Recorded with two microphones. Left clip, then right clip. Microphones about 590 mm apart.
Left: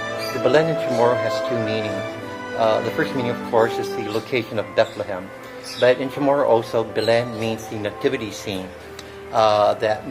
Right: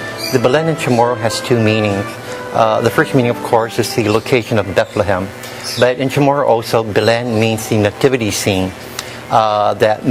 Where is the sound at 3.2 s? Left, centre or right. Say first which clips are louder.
Right 6 dB; right.